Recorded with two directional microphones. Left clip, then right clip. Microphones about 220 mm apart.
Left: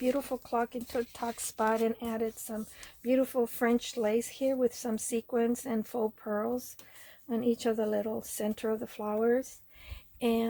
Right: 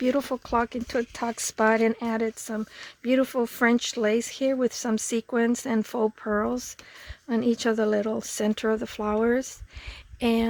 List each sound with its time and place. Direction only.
0.0 s speech: 45° right (ahead or behind)